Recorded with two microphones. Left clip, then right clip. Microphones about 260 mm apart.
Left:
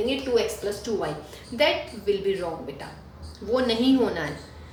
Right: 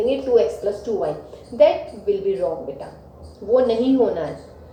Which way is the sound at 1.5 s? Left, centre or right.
Left.